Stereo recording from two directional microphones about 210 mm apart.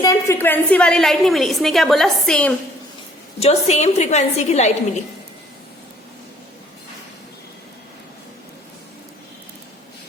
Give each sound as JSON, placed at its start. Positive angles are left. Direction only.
{"t": 0.0, "sound": "a woman's voice", "side_deg": 15}
{"t": 3.4, "sound": "a woman's voice", "side_deg": 30}